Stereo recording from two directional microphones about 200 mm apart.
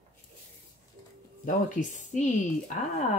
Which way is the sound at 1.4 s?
40° left (ahead or behind).